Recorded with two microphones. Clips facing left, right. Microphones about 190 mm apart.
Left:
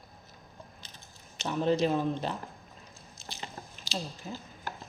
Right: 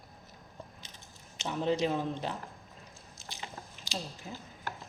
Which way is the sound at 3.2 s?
15° right (ahead or behind).